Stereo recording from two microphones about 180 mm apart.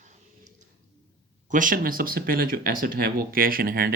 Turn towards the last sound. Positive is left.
turn(degrees=-55)  # may be behind; listen again after turning